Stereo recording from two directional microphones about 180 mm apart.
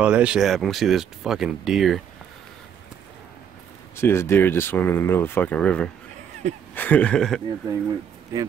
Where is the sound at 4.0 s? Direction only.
15° left (ahead or behind).